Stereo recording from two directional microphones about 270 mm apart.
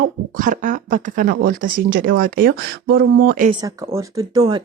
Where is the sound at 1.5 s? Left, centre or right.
Right.